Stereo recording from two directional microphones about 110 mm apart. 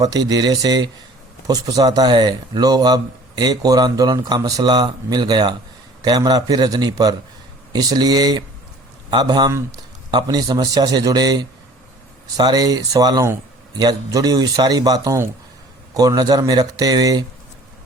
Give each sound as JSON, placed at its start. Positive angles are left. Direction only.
{"t": 0.0, "sound": "a man's voice", "side_deg": -35}